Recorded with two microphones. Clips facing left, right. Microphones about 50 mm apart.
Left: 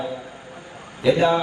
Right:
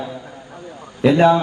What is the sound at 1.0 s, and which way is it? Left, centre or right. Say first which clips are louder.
Speech: right 5 dB; right.